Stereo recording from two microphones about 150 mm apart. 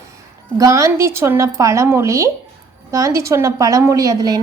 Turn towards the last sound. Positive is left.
turn(degrees=-25)  # may be behind; listen again after turning